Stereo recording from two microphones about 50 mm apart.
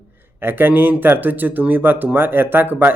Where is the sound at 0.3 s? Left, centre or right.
Right.